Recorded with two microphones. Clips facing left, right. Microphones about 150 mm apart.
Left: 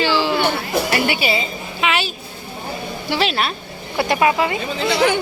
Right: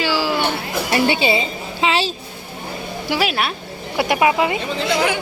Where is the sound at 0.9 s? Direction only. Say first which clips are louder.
Right 6 dB; 25° right (ahead or behind).